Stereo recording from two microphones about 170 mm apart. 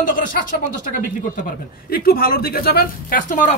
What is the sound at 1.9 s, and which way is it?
A man's voice, 65° left (ahead or behind).